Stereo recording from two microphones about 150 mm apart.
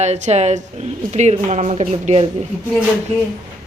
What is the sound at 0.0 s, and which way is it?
A woman's voice, 50° right (ahead or behind).